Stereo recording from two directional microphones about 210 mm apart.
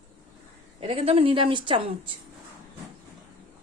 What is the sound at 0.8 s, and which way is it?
A woman's voice, 30° right (ahead or behind).